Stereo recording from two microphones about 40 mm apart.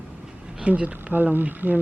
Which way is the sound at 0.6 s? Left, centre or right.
Right.